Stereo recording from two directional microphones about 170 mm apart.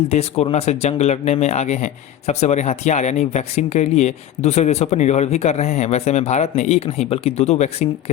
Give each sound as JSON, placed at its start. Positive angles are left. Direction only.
{"t": 0.1, "sound": "speech", "side_deg": 35}